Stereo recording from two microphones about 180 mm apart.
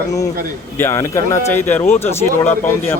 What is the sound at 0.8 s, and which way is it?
Speech, 15° left (ahead or behind).